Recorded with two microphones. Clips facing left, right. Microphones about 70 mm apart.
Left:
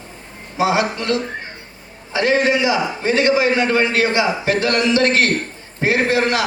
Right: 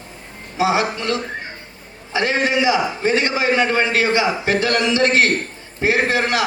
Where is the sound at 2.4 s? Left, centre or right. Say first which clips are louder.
Even; right.